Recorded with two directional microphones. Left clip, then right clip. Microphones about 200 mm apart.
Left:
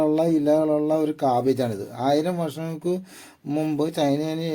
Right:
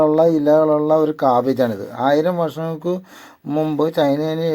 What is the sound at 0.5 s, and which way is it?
Mantra, 35° right (ahead or behind).